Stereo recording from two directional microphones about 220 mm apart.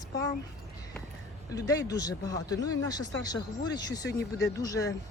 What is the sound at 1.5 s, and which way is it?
Speech, 15° left (ahead or behind).